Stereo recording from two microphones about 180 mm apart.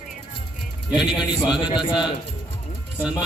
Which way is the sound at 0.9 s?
5° right (ahead or behind).